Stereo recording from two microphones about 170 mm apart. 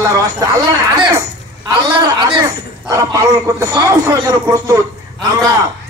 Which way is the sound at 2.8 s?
20° right (ahead or behind).